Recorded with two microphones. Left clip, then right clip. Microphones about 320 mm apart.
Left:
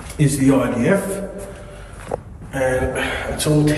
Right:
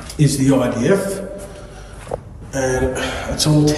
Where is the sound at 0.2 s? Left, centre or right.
Centre.